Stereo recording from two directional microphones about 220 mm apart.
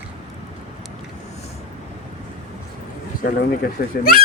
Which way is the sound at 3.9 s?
45° left (ahead or behind).